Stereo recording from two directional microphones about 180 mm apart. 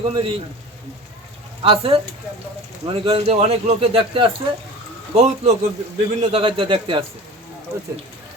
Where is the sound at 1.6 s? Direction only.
30° right (ahead or behind).